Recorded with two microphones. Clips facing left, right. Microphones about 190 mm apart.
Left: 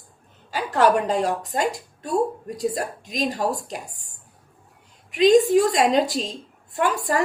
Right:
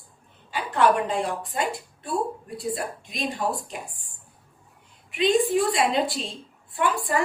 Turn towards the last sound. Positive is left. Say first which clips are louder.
# left 2 dB
turn(degrees=40)  # may be behind; listen again after turning